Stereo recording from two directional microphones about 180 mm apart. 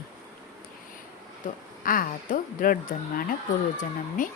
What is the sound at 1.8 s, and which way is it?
Speech, 50° left (ahead or behind).